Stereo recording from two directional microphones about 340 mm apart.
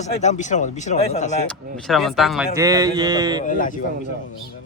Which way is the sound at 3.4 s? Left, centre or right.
Left.